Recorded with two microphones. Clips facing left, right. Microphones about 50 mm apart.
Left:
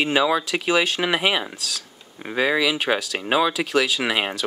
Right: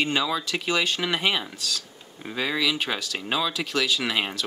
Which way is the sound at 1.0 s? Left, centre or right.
Centre.